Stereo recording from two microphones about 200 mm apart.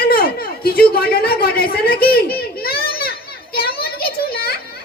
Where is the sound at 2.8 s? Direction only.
50° left (ahead or behind).